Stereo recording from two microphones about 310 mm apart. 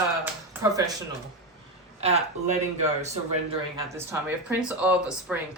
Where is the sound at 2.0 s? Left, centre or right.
Right.